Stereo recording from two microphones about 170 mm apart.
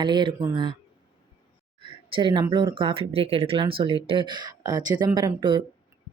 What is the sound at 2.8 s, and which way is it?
Speech, 30° right (ahead or behind).